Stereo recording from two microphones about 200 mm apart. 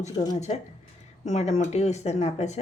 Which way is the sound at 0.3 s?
35° left (ahead or behind).